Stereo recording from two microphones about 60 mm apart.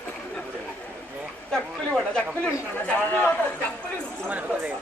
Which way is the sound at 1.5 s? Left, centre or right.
Centre.